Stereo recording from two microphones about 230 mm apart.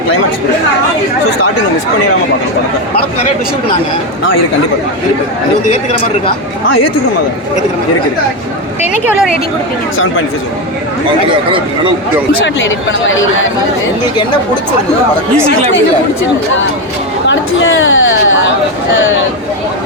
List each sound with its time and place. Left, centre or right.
12.9 s speech: left
17.2 s speech: left